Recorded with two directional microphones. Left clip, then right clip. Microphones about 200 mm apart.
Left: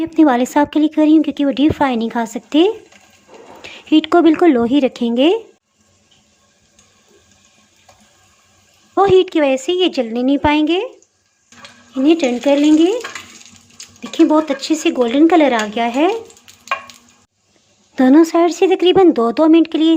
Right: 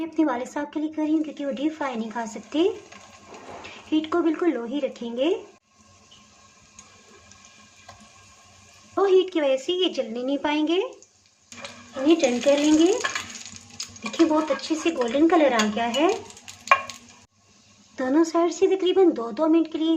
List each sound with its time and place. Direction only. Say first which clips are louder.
0.0 s a woman's voice: left 12 dB; 40° left (ahead or behind)
9.0 s speech: left 8 dB; 35° left (ahead or behind)
12.0 s a woman's voice: left 6 dB; 50° left (ahead or behind)
14.7 s a woman's voice: left 8 dB; 50° left (ahead or behind)
17.9 s speech: left 11 dB; 40° left (ahead or behind)